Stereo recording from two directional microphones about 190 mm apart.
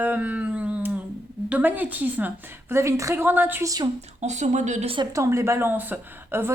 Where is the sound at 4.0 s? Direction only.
35° right (ahead or behind).